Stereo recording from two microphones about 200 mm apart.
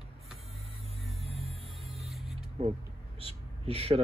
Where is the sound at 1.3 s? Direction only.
30° right (ahead or behind).